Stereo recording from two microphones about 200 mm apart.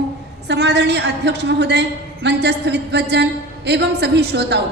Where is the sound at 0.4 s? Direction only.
60° right (ahead or behind).